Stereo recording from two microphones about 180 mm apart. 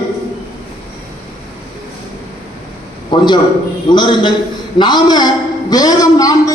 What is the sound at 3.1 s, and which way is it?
A man's voice, 25° left (ahead or behind).